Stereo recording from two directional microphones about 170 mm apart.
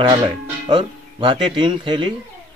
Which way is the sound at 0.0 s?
30° right (ahead or behind).